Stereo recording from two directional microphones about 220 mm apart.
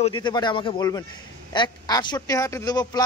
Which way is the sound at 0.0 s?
20° left (ahead or behind).